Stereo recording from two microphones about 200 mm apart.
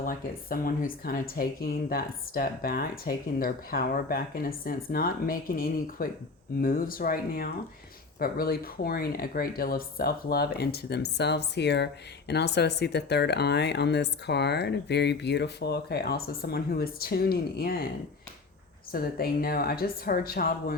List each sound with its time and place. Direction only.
0.0 s speech: 45° left (ahead or behind)
18.9 s speech: 45° left (ahead or behind)